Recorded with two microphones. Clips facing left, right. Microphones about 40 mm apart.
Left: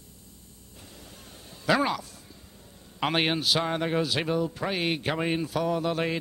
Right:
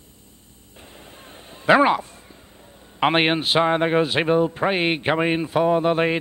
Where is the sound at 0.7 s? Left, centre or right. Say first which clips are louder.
Right 5 dB; right.